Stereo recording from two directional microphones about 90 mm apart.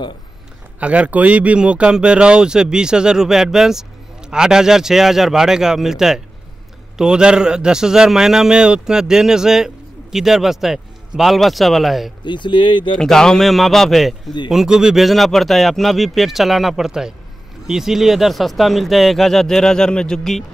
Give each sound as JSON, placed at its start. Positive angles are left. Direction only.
{"t": 0.7, "sound": "speech", "side_deg": -15}
{"t": 12.3, "sound": "speech", "side_deg": 60}
{"t": 12.9, "sound": "speech", "side_deg": 5}